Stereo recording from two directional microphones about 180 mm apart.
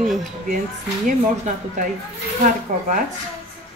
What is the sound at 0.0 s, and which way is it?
Speech, centre (ahead or behind).